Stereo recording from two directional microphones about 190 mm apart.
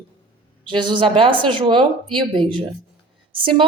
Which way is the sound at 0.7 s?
25° right (ahead or behind).